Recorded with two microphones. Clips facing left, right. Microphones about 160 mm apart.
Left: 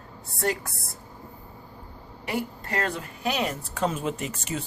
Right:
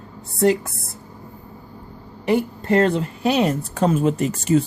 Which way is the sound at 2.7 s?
25° right (ahead or behind).